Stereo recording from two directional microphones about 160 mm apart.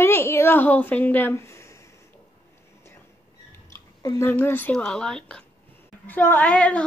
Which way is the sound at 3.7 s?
20° left (ahead or behind).